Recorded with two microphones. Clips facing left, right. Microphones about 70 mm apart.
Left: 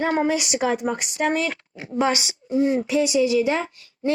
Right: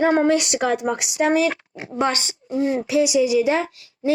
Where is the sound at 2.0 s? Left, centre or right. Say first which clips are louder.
Even; centre.